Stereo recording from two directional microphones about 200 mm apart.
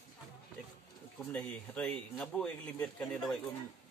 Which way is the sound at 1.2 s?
5° left (ahead or behind).